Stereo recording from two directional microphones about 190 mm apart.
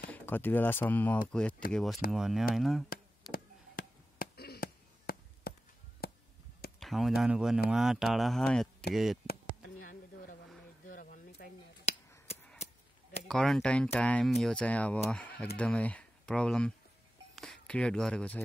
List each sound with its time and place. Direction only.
0.1 s speech: 10° left (ahead or behind)
2.9 s a sound: 50° left (ahead or behind)
6.0 s chop: 55° left (ahead or behind)
6.8 s speech: centre (ahead or behind)
9.3 s a sound: 50° left (ahead or behind)
13.3 s speech: 5° left (ahead or behind)